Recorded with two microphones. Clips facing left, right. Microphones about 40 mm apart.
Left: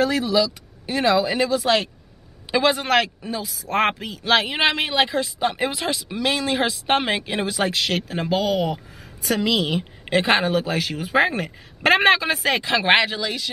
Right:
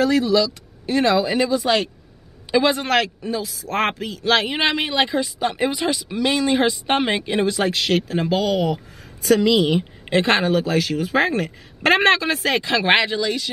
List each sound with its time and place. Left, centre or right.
0.0 s speech: centre